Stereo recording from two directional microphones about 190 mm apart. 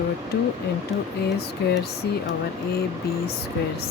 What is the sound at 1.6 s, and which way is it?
Speech, 60° left (ahead or behind).